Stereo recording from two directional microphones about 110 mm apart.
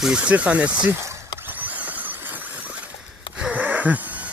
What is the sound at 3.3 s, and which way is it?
Gasp, 10° right (ahead or behind).